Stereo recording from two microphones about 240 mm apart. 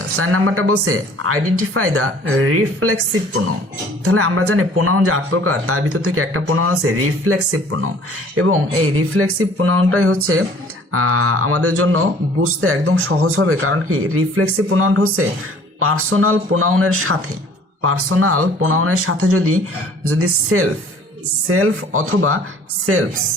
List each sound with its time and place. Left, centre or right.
0.2 s speech: right
4.0 s speech: right
9.0 s speech: right